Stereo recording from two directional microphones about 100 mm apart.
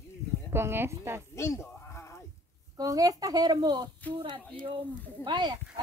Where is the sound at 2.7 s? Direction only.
35° right (ahead or behind).